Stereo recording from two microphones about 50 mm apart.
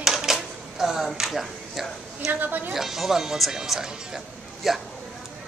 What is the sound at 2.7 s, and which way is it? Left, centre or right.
Speech, centre.